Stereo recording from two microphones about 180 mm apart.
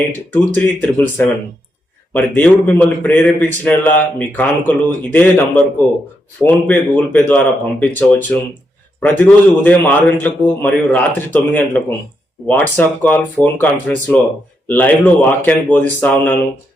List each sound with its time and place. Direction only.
0.3 s a man's voice: 10° left (ahead or behind)